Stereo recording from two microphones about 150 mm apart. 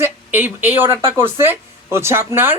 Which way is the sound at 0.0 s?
15° right (ahead or behind).